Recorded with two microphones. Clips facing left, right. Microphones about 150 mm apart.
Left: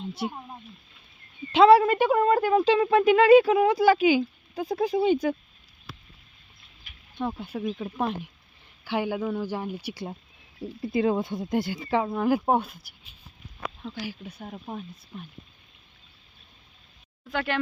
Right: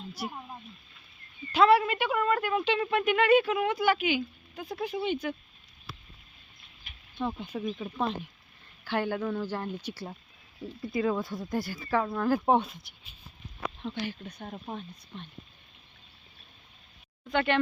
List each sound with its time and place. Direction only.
0.1 s speech: 25° left (ahead or behind)
1.5 s speech: 35° left (ahead or behind)
7.2 s speech: 10° left (ahead or behind)
10.8 s speech: 25° left (ahead or behind)
12.5 s speech: centre (ahead or behind)
13.8 s speech: 5° left (ahead or behind)
17.2 s speech: centre (ahead or behind)